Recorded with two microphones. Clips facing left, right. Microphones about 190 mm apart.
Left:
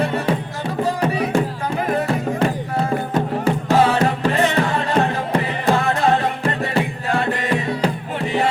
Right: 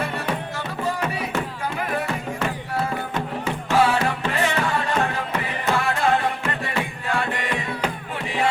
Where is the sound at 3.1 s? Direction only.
35° left (ahead or behind).